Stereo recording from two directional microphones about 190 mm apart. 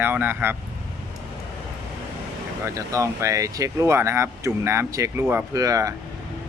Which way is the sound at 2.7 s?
15° right (ahead or behind).